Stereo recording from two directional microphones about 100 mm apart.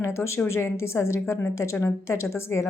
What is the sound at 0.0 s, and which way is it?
A woman's voice, 25° left (ahead or behind).